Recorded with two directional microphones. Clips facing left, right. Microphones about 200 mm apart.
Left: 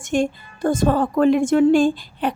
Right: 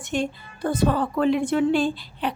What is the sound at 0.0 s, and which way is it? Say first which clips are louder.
A woman's voice: left 6 dB; 45° left (ahead or behind).